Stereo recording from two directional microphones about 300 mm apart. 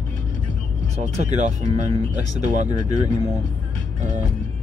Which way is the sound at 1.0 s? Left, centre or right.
Right.